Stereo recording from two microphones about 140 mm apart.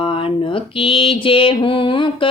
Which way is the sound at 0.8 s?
40° left (ahead or behind).